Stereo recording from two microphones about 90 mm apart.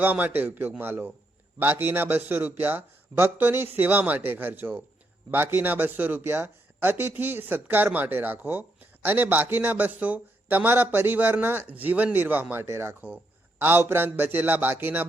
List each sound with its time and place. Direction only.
0.0 s a man's voice: 20° right (ahead or behind)